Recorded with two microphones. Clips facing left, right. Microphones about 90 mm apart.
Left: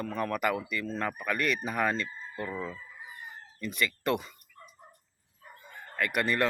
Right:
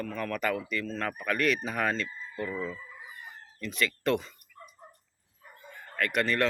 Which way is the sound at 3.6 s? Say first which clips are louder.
Right 1 dB; 5° left (ahead or behind).